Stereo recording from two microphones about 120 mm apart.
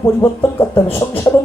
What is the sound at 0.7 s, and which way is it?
Speech, 25° left (ahead or behind).